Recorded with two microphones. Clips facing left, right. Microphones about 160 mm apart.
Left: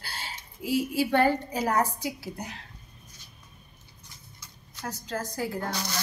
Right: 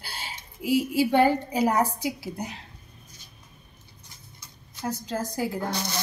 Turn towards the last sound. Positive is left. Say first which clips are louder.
# right 2 dB
turn(degrees=-25)  # may be behind; listen again after turning